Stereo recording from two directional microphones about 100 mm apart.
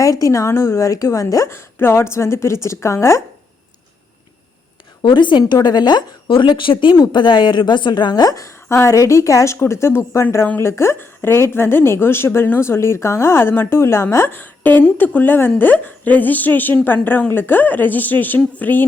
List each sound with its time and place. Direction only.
0.0 s speech: 35° left (ahead or behind)
5.0 s a woman's voice: 50° left (ahead or behind); by 18.9 s 20° left (ahead or behind)